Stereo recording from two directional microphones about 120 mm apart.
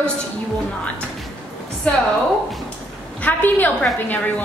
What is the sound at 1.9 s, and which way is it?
Speech, 10° left (ahead or behind).